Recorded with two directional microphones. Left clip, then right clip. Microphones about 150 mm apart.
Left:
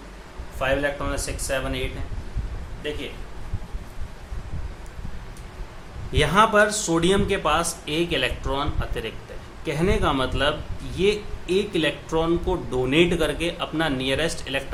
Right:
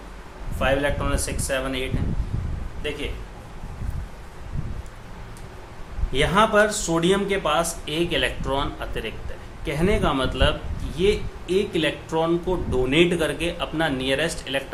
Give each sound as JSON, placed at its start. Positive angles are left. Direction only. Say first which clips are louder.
{"t": 0.6, "sound": "speech", "louder": "right 1 dB", "side_deg": 5}
{"t": 6.1, "sound": "speech", "louder": "left 1 dB", "side_deg": 15}